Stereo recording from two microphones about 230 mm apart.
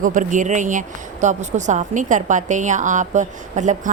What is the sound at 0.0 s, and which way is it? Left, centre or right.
Speech, right.